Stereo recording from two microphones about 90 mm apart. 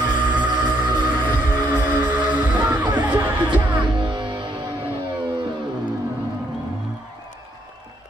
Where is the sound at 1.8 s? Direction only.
20° right (ahead or behind).